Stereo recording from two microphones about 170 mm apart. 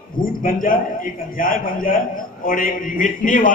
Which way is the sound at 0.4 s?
55° left (ahead or behind).